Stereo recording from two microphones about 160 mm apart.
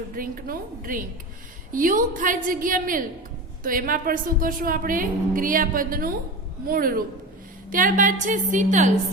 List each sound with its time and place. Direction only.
0.2 s a woman's voice: 65° right (ahead or behind)